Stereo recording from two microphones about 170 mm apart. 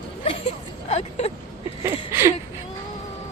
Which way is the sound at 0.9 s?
40° left (ahead or behind).